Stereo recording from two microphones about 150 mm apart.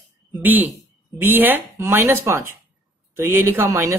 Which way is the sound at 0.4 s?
10° right (ahead or behind).